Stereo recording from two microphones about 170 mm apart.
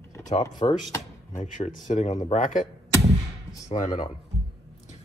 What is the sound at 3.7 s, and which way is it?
Speech, 50° left (ahead or behind).